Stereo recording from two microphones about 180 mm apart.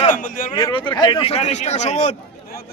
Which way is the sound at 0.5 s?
25° left (ahead or behind).